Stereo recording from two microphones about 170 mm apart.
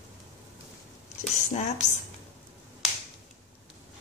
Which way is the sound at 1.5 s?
45° left (ahead or behind).